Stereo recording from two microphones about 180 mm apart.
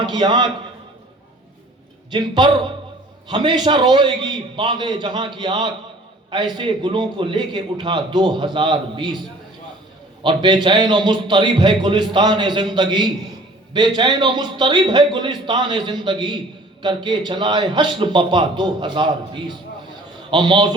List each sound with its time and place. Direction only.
0.0 s a man's voice: 25° right (ahead or behind)
2.0 s a man's voice: 25° right (ahead or behind)
10.2 s a man's voice: 25° right (ahead or behind)